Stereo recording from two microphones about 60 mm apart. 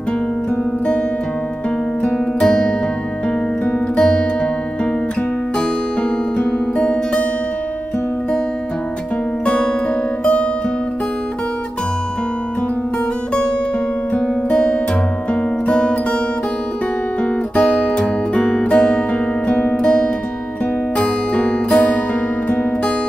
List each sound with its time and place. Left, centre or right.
2.1 s music: centre
3.9 s music: centre
6.3 s music: centre
9.5 s music: centre
14.1 s music: centre
17.2 s music: centre